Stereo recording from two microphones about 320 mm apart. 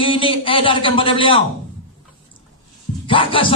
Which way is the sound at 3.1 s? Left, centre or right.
Centre.